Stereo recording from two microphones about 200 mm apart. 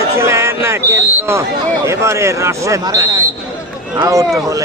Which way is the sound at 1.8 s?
15° right (ahead or behind).